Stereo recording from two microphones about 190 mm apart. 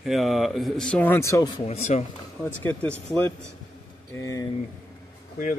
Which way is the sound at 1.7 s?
35° left (ahead or behind).